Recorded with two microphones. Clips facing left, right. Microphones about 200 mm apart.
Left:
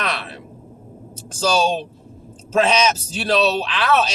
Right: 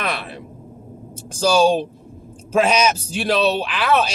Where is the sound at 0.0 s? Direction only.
10° right (ahead or behind).